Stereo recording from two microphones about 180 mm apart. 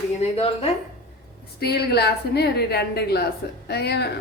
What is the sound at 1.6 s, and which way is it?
Speech, 65° left (ahead or behind).